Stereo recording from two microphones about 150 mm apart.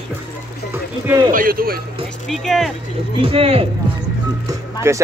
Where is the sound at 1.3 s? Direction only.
70° right (ahead or behind).